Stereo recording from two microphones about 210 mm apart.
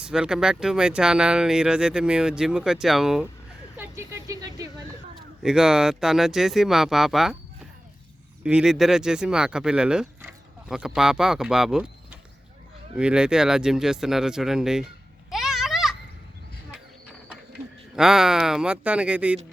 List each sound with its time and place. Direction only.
0.0 s speech: 5° right (ahead or behind)
3.8 s speech: 15° right (ahead or behind)
5.4 s speech: centre (ahead or behind)
8.4 s speech: 5° right (ahead or behind)
15.3 s a sound: centre (ahead or behind)
17.9 s speech: 5° right (ahead or behind)